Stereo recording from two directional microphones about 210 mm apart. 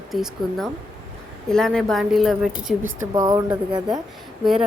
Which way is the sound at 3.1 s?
20° right (ahead or behind).